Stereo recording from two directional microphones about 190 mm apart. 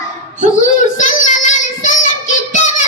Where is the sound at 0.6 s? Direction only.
40° left (ahead or behind).